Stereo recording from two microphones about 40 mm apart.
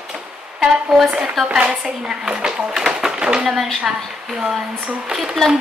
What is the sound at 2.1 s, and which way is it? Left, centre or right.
Speech, centre.